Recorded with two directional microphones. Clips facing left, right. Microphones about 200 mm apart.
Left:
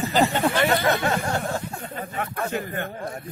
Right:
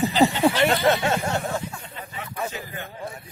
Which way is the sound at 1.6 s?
50° left (ahead or behind).